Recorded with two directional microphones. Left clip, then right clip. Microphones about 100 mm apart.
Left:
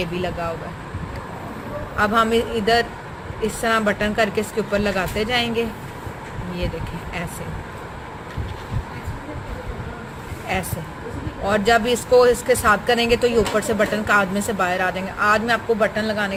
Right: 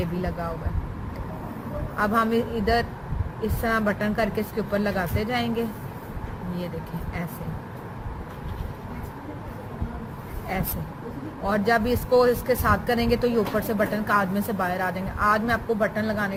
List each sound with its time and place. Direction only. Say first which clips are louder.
2.0 s speech: left 5 dB; 50° left (ahead or behind)
11.4 s speech: left 5 dB; 45° left (ahead or behind)